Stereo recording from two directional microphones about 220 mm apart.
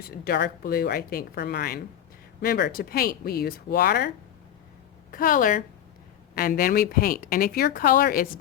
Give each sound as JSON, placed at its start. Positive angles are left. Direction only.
{"t": 0.0, "sound": "speech", "side_deg": 45}
{"t": 5.1, "sound": "speech", "side_deg": 40}